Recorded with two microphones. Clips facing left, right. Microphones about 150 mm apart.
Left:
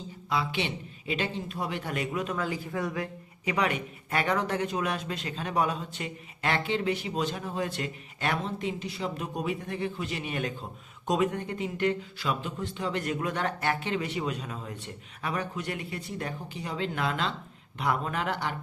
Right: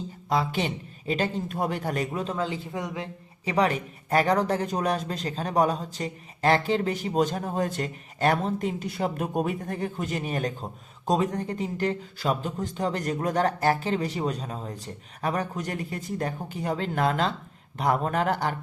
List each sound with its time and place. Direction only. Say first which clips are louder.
0.3 s speech: right 4 dB; 40° right (ahead or behind); by 3.5 s 25° right (ahead or behind)
3.5 s speech: right 4 dB; 35° right (ahead or behind)